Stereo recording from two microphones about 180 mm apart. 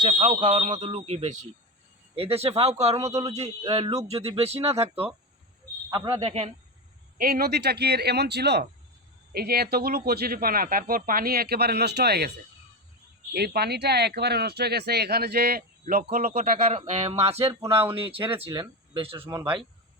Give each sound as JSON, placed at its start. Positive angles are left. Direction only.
{"t": 0.1, "sound": "speech", "side_deg": -40}
{"t": 6.2, "sound": "speech", "side_deg": -35}
{"t": 7.2, "sound": "speech", "side_deg": -55}
{"t": 13.3, "sound": "speech", "side_deg": -60}